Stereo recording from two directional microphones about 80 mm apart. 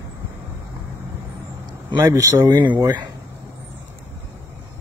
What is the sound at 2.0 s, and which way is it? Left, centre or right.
Speech, right.